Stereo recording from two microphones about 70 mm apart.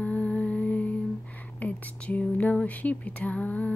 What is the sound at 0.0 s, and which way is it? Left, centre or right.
Music, centre.